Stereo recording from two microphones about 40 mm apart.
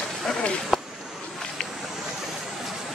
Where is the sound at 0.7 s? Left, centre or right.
Centre.